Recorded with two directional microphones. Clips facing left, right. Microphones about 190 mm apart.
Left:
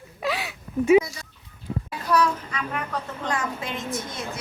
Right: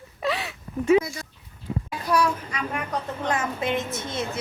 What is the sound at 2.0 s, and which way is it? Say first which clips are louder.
Speech: left 1 dB; 10° right (ahead or behind).